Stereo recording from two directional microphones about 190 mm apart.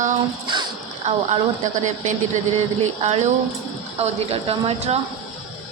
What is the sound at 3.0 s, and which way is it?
A woman's voice, 35° right (ahead or behind).